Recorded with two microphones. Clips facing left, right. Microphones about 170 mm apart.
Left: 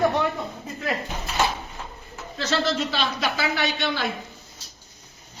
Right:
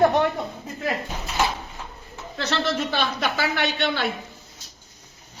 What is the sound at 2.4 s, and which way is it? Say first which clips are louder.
A man's voice: left 1 dB; 60° right (ahead or behind).